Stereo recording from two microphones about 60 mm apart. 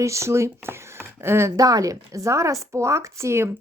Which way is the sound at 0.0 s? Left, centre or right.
Right.